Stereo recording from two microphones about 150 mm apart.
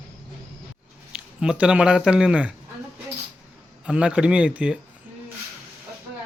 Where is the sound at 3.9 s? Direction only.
5° right (ahead or behind).